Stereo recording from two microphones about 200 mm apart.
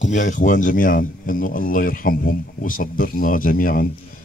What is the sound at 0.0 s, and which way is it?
Speech, 40° left (ahead or behind).